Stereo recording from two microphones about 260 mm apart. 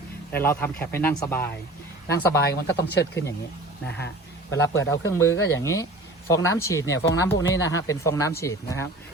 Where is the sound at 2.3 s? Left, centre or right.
Left.